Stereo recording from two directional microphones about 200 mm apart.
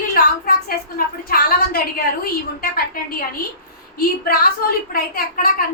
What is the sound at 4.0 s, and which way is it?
A woman's voice, 45° left (ahead or behind).